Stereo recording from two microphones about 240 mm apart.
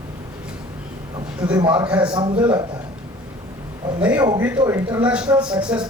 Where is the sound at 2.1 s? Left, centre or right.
Centre.